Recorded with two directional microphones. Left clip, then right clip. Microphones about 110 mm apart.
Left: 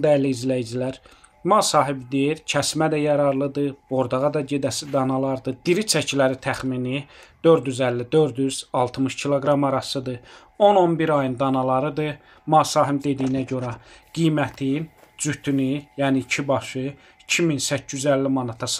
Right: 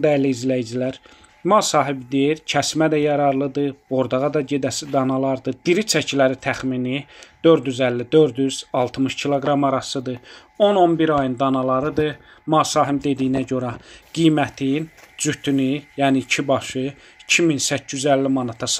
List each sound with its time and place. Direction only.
0.0 s speech: 20° right (ahead or behind)